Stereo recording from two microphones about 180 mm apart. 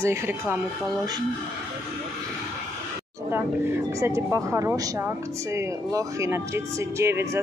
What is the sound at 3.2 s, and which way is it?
Speech, 15° right (ahead or behind).